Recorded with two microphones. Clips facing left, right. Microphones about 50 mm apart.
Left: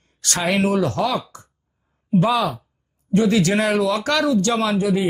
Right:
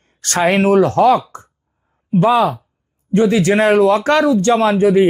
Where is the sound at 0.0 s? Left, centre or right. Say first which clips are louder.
Right 8 dB; right.